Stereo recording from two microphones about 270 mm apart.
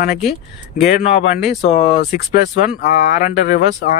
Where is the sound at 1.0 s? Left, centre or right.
Left.